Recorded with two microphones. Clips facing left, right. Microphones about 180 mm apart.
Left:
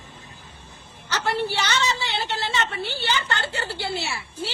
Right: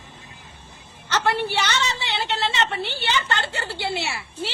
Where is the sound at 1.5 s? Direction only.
60° right (ahead or behind).